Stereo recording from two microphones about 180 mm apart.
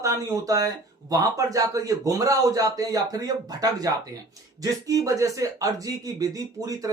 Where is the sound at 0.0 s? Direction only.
20° right (ahead or behind).